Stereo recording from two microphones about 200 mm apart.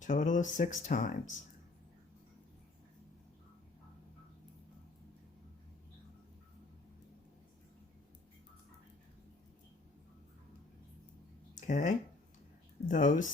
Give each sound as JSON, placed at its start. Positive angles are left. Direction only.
{"t": 0.0, "sound": "speech", "side_deg": 40}
{"t": 11.5, "sound": "speech", "side_deg": 40}